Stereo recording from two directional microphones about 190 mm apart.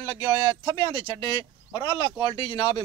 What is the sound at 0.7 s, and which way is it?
Speech, 25° left (ahead or behind).